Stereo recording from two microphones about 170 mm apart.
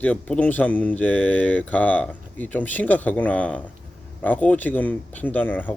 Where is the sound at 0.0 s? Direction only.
10° left (ahead or behind).